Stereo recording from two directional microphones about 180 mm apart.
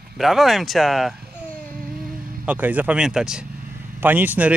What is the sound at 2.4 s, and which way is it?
Speech, 10° right (ahead or behind).